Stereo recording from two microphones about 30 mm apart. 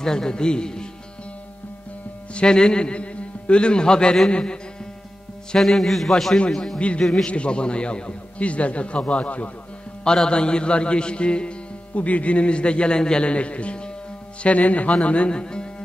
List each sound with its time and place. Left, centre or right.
0.0 s speech: left
2.3 s a man's voice: left
5.6 s a man's voice: centre
7.2 s a man's voice: left
10.3 s a man's voice: left
11.9 s a man's voice: left
15.0 s a man's voice: left
15.3 s speech: left